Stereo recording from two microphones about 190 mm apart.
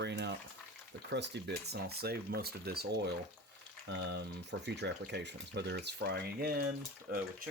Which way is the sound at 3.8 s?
65° right (ahead or behind).